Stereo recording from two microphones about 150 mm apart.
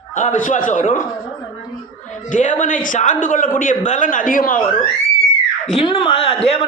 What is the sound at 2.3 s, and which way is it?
A woman's voice, 55° left (ahead or behind).